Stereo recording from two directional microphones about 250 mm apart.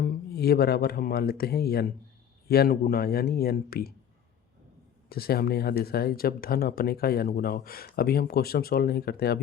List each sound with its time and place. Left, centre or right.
0.0 s speech: left
5.0 s speech: left